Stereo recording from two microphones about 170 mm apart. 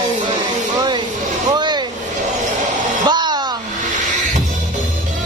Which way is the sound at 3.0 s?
25° right (ahead or behind).